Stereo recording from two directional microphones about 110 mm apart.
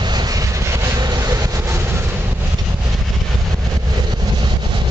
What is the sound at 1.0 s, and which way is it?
Vehicle, 35° right (ahead or behind).